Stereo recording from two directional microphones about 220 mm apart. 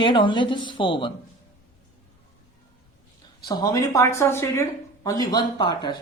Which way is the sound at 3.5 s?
15° left (ahead or behind).